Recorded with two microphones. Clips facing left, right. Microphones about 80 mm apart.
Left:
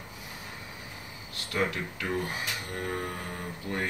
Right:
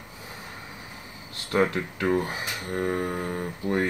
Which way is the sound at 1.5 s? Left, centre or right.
Right.